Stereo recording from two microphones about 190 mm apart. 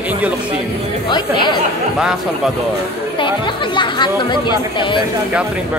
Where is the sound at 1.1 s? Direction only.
25° left (ahead or behind).